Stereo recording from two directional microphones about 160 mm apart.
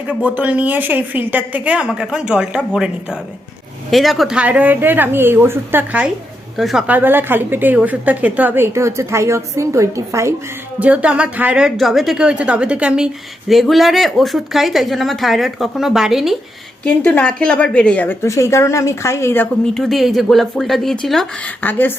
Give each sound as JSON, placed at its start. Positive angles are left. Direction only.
{"t": 0.1, "sound": "a woman's voice", "side_deg": -10}
{"t": 10.8, "sound": "a woman's voice", "side_deg": -10}
{"t": 16.8, "sound": "speech", "side_deg": 10}
{"t": 19.8, "sound": "speech", "side_deg": 0}